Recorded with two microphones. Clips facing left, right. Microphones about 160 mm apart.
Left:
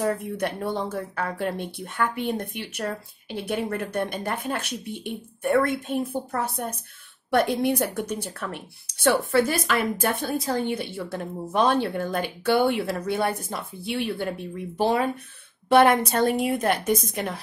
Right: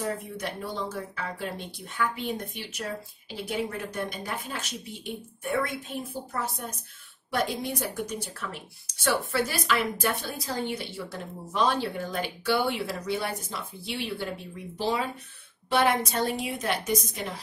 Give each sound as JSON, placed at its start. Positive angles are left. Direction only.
{"t": 0.0, "sound": "a woman's voice", "side_deg": 60}